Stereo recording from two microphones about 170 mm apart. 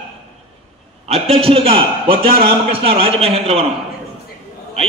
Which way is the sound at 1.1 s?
35° right (ahead or behind).